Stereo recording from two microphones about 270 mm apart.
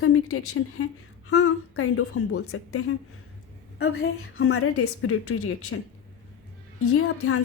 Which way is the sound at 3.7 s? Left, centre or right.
Left.